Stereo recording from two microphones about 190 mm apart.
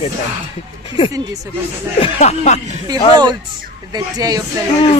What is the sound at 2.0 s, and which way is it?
Speech, 35° left (ahead or behind).